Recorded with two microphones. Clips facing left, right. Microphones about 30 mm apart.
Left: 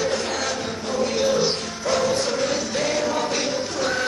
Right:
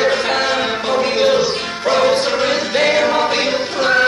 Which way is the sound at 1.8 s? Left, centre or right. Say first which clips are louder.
Right 7 dB; right.